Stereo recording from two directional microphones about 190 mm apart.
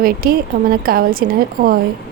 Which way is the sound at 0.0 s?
50° right (ahead or behind).